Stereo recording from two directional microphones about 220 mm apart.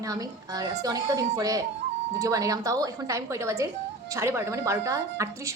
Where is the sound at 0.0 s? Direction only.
15° right (ahead or behind).